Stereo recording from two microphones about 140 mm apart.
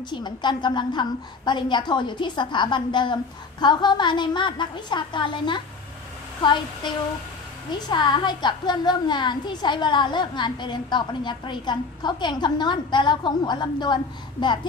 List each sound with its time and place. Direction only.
0.1 s a woman's voice: 30° left (ahead or behind)
7.9 s a woman's voice: 35° left (ahead or behind)